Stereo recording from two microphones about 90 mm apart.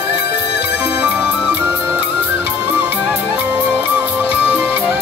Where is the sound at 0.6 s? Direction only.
15° right (ahead or behind).